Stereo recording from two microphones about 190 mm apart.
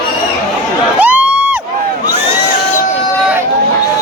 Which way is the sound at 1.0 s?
10° right (ahead or behind).